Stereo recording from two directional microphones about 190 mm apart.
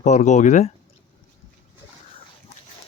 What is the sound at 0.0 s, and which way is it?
Speech, 40° left (ahead or behind).